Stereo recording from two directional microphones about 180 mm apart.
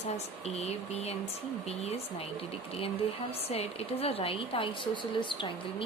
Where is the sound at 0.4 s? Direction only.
35° left (ahead or behind).